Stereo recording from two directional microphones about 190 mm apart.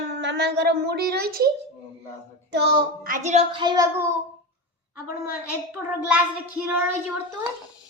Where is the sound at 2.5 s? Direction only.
65° right (ahead or behind).